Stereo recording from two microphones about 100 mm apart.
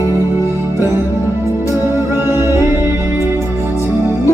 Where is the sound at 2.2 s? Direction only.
25° right (ahead or behind).